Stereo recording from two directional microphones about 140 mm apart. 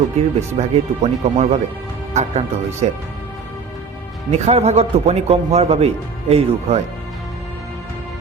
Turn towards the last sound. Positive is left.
turn(degrees=-45)  # may be behind; listen again after turning